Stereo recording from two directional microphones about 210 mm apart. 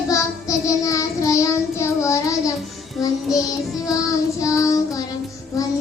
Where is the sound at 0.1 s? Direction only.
15° left (ahead or behind).